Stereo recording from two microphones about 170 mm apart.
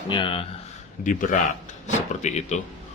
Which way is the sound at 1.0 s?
50° left (ahead or behind).